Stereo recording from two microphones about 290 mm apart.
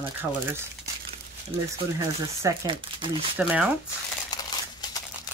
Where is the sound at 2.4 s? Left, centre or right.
Centre.